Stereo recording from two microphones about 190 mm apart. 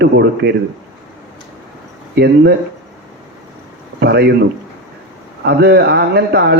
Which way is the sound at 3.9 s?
60° right (ahead or behind).